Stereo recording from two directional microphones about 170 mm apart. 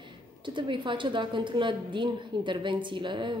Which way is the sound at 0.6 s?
30° right (ahead or behind).